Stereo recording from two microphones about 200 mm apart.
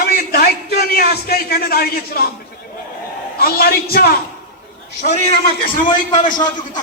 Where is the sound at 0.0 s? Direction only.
50° left (ahead or behind).